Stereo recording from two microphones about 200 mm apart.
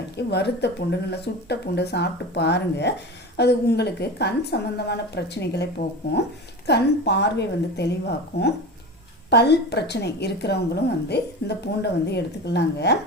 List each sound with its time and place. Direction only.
0.2 s a woman's voice: 55° left (ahead or behind)
6.7 s a woman's voice: 55° left (ahead or behind)
9.3 s a woman's voice: 55° left (ahead or behind)